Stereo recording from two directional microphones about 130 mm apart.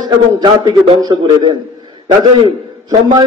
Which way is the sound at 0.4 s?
35° right (ahead or behind).